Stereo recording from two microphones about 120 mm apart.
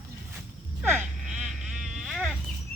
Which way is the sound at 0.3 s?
5° right (ahead or behind).